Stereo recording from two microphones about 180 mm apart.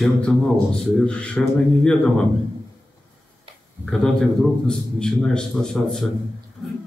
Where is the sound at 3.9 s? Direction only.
5° left (ahead or behind).